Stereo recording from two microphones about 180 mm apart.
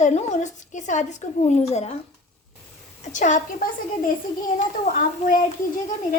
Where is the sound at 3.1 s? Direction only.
45° left (ahead or behind).